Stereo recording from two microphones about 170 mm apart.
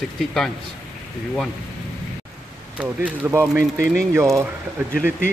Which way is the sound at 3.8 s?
5° left (ahead or behind).